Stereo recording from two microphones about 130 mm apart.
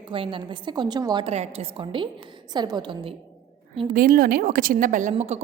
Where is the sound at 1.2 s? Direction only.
55° right (ahead or behind); by 3.1 s 35° right (ahead or behind).